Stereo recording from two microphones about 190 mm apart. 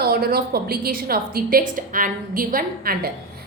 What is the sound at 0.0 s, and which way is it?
A woman's voice, 55° right (ahead or behind).